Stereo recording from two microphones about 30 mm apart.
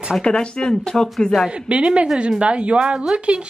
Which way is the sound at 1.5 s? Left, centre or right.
Right.